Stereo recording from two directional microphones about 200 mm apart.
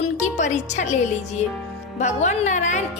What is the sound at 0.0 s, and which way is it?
A woman's voice, 35° left (ahead or behind).